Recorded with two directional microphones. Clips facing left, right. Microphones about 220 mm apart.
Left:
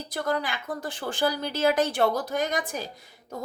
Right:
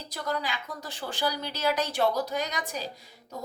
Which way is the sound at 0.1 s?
50° left (ahead or behind).